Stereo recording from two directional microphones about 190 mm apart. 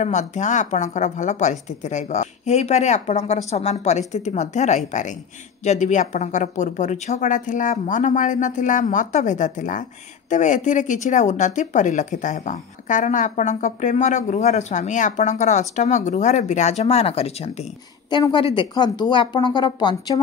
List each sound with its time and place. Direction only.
0.0 s speech: 40° left (ahead or behind); by 20.2 s 25° left (ahead or behind)